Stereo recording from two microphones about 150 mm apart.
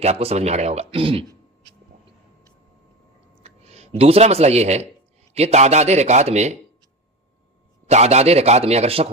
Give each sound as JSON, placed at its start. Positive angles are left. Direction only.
{"t": 0.0, "sound": "a man's voice", "side_deg": -45}
{"t": 3.4, "sound": "a man's voice", "side_deg": -45}
{"t": 7.9, "sound": "a man's voice", "side_deg": -50}